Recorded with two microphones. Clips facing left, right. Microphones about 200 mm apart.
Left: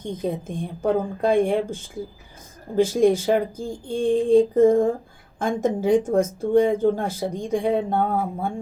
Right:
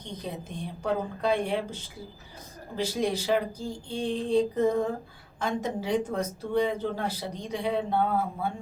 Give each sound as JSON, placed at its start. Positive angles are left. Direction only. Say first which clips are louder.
{"t": 0.0, "sound": "speech", "louder": "left 10 dB", "side_deg": 50}